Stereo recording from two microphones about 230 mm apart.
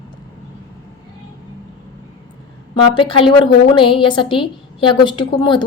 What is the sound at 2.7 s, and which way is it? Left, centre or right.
A woman's voice, left.